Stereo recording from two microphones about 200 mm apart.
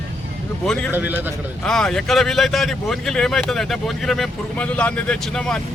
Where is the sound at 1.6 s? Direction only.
5° left (ahead or behind).